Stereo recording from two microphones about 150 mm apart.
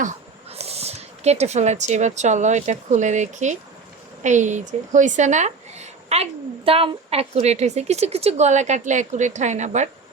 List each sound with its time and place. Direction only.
0.5 s a woman's voice: 45° right (ahead or behind)